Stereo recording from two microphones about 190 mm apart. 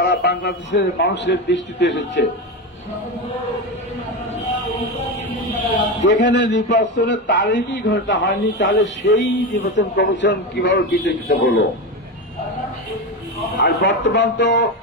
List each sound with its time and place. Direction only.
0.0 s a man's voice: 60° left (ahead or behind)
6.2 s a man's voice: 70° left (ahead or behind)
13.6 s a man's voice: 65° left (ahead or behind)